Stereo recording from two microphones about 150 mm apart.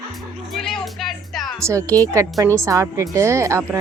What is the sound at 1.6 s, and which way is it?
Speech, 20° right (ahead or behind).